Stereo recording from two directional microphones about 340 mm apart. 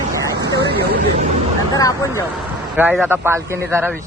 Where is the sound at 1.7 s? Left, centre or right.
Centre.